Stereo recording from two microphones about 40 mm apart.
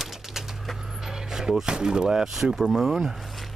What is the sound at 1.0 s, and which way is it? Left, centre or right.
Speech, centre.